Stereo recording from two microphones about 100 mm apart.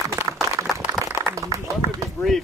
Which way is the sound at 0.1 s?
30° right (ahead or behind).